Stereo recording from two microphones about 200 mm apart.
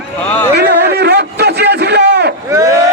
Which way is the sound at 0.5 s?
55° right (ahead or behind).